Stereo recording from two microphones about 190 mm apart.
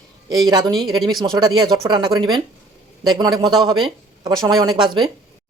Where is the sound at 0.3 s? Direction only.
20° right (ahead or behind).